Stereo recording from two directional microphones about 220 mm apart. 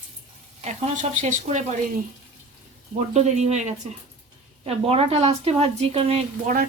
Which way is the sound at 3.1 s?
30° right (ahead or behind).